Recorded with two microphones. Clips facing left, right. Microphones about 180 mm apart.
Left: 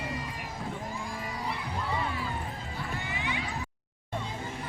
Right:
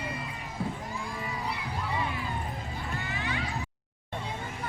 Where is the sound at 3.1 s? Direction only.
15° left (ahead or behind).